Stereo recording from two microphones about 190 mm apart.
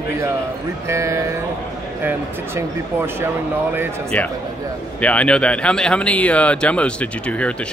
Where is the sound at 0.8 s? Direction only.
15° right (ahead or behind).